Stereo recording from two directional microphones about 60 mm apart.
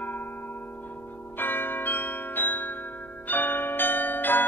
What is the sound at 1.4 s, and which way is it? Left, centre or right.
Change ringing, left.